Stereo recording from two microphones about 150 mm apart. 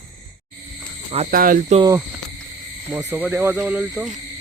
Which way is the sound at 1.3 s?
70° right (ahead or behind).